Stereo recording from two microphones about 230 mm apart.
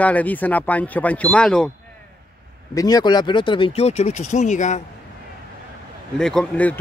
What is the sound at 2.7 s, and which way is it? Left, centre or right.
Speech, centre.